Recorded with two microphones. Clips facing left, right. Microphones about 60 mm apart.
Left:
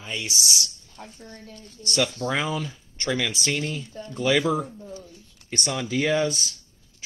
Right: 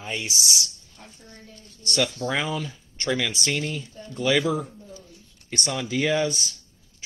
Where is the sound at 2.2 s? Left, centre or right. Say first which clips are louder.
Even; centre.